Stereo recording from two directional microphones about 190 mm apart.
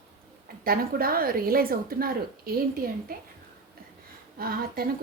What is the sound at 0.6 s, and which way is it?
A woman's voice, 50° right (ahead or behind).